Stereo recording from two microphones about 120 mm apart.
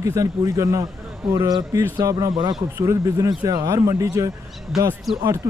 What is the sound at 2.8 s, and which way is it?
Speech, 25° right (ahead or behind).